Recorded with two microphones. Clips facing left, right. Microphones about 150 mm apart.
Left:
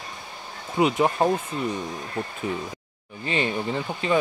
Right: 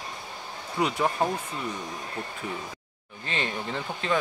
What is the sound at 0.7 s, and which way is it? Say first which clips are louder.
Speech: left 5 dB; 20° left (ahead or behind).